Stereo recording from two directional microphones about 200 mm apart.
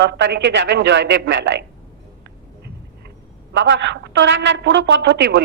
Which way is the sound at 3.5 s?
65° right (ahead or behind).